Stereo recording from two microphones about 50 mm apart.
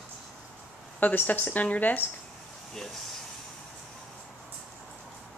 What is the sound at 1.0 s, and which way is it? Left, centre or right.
Speech, left.